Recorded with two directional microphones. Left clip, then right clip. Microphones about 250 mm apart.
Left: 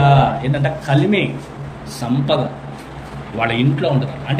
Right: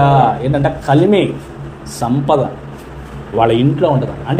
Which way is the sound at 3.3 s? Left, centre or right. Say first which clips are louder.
Right 6 dB; centre.